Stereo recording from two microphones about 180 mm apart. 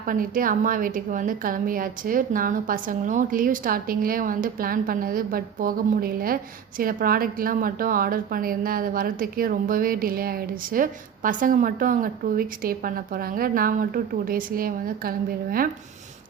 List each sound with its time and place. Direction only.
0.0 s a woman's voice: 50° right (ahead or behind)